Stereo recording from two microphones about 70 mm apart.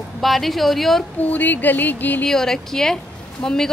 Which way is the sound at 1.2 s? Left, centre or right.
Left.